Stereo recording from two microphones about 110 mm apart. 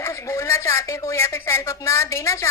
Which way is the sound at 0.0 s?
25° left (ahead or behind).